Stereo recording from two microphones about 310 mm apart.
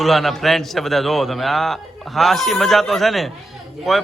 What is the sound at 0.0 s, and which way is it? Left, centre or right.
A man's voice, centre.